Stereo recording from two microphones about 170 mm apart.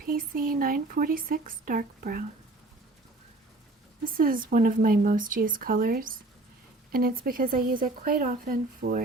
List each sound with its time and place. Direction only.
0.0 s speech: 55° right (ahead or behind)
4.0 s speech: 55° right (ahead or behind)